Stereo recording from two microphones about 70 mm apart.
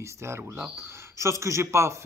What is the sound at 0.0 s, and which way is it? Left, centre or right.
Speech, right.